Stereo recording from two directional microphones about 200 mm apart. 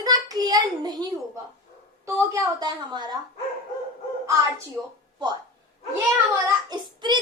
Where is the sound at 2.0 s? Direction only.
15° right (ahead or behind).